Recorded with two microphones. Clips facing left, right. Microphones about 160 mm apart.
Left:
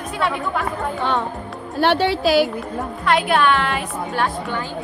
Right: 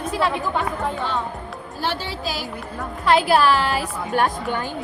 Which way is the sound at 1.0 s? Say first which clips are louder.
Left 4 dB; 65° left (ahead or behind).